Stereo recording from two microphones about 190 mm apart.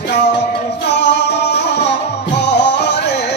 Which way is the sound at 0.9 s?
65° left (ahead or behind).